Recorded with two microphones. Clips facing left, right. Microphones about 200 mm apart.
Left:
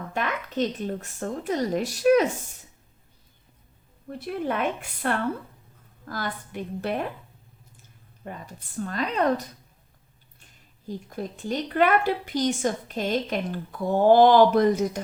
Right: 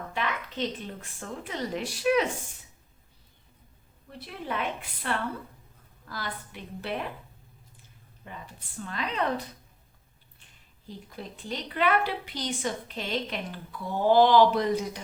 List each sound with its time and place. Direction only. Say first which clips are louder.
0.1 s a woman's voice: left 4 dB; 45° left (ahead or behind)
4.2 s a woman's voice: left 6 dB; 50° left (ahead or behind)
8.2 s a woman's voice: left 6 dB; 45° left (ahead or behind)
10.8 s a woman's voice: left 8 dB; 45° left (ahead or behind)